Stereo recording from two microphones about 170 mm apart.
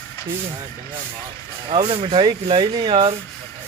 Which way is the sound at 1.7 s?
30° right (ahead or behind).